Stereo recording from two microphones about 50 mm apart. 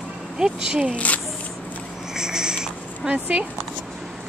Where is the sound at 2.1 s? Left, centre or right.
Centre.